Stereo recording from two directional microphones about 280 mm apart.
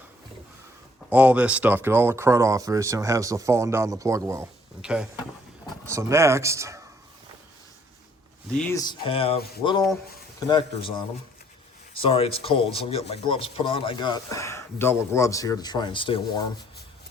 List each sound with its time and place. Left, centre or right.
1.1 s speech: centre
8.5 s speech: centre
10.4 s speech: centre